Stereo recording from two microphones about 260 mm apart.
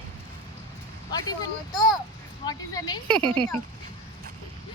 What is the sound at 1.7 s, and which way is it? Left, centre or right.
Speech, centre.